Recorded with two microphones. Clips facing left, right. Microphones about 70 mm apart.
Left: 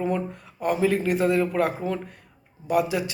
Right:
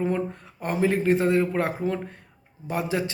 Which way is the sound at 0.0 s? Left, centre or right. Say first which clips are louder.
Even; right.